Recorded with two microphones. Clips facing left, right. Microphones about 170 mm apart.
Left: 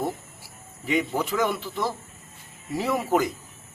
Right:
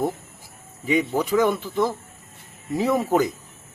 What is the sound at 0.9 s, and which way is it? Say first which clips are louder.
Speech: right 4 dB; 15° right (ahead or behind).